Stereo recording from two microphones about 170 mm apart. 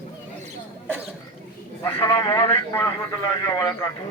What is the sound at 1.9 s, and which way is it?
Speech, 30° left (ahead or behind).